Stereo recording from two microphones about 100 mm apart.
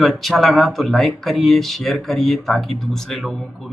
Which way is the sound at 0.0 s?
Centre (ahead or behind).